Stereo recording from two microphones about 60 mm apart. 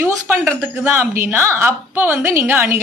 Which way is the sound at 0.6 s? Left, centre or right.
Right.